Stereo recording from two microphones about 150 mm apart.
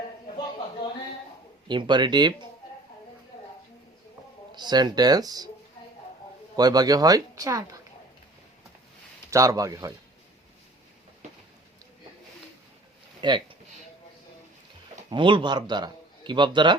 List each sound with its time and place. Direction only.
1.6 s a man's voice: 30° right (ahead or behind)
4.5 s speech: 30° right (ahead or behind)
6.6 s speech: 25° right (ahead or behind)
9.3 s speech: 20° right (ahead or behind)
13.2 s a man's voice: 30° right (ahead or behind)
15.1 s a man's voice: 35° right (ahead or behind)